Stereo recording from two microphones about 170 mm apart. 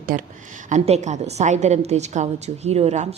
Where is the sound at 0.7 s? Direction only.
40° right (ahead or behind).